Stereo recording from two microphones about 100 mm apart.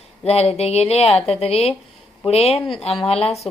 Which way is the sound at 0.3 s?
90° left.